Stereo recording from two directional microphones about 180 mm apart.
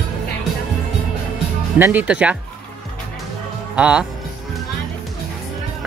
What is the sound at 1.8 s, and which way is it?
Speech, 10° right (ahead or behind).